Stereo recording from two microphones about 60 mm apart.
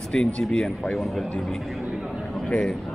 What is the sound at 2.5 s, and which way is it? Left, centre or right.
Speech, centre.